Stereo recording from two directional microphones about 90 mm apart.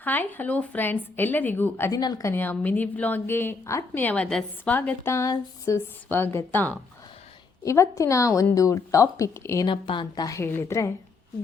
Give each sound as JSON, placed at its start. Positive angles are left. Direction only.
{"t": 0.0, "sound": "a woman's voice", "side_deg": 20}
{"t": 1.9, "sound": "a woman's voice", "side_deg": 45}
{"t": 2.2, "sound": "a woman's voice", "side_deg": 25}
{"t": 7.6, "sound": "speech", "side_deg": 35}
{"t": 9.6, "sound": "a woman's voice", "side_deg": 65}
{"t": 10.2, "sound": "a woman's voice", "side_deg": 35}